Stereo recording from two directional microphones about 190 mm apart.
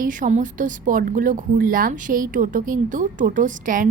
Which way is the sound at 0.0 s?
45° right (ahead or behind).